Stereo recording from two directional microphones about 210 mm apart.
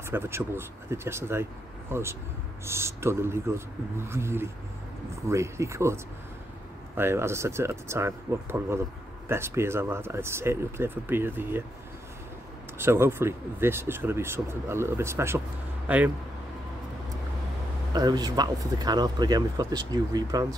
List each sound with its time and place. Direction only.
0.1 s speech: 10° right (ahead or behind)
7.0 s speech: 10° right (ahead or behind)
12.7 s speech: 10° right (ahead or behind)
17.9 s speech: 20° right (ahead or behind)